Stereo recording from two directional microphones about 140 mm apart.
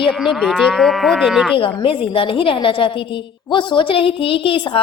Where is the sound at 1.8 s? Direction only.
40° left (ahead or behind).